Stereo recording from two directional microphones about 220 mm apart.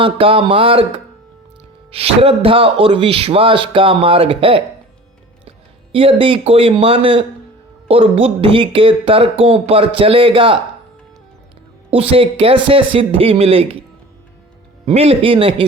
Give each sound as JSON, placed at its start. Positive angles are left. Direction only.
{"t": 0.0, "sound": "speech", "side_deg": -25}
{"t": 11.9, "sound": "speech", "side_deg": -25}
{"t": 14.8, "sound": "speech", "side_deg": -25}